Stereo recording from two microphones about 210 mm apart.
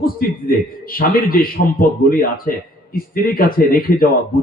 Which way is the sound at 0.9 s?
45° left (ahead or behind).